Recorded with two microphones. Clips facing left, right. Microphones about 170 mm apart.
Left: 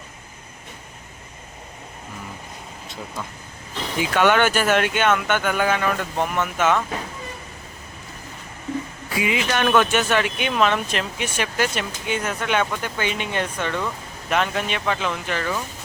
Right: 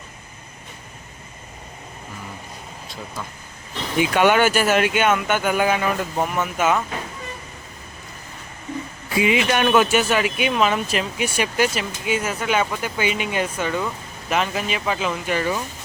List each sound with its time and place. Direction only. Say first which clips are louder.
4.1 s speech: right 1 dB; 10° right (ahead or behind)
9.2 s speech: right 3 dB; 20° right (ahead or behind)
9.6 s speech: even; 10° right (ahead or behind)